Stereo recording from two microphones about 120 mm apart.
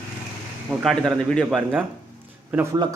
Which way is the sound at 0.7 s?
5° right (ahead or behind).